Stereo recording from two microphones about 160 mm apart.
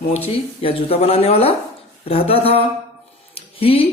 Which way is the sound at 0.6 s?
35° left (ahead or behind).